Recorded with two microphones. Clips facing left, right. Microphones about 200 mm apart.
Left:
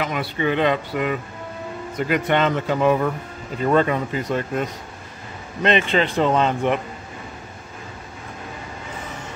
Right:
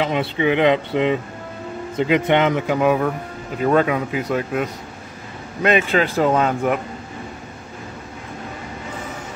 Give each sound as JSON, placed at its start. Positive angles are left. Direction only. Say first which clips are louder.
{"t": 0.0, "sound": "a man's voice", "louder": "right 4 dB", "side_deg": -25}